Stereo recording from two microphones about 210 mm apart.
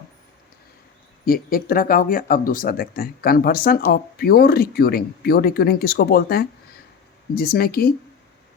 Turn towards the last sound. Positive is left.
turn(degrees=45)  # may be behind; listen again after turning